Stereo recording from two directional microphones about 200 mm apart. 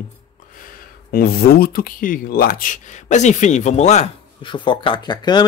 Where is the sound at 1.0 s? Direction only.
50° left (ahead or behind).